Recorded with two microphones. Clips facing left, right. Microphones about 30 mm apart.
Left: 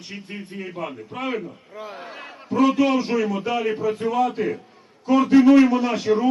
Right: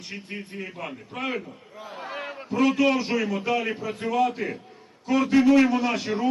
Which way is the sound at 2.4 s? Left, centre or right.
Centre.